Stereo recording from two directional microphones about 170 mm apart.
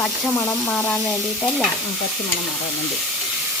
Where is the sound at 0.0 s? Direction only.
10° left (ahead or behind).